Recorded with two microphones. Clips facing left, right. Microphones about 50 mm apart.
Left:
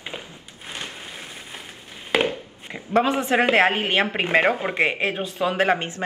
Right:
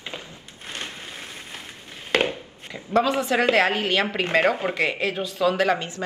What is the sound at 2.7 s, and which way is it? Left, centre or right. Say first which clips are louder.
Speech: left 1 dB; left.